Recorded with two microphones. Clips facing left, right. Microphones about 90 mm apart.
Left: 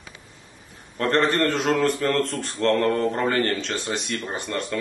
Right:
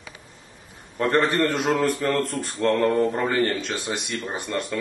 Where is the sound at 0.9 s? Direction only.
5° right (ahead or behind).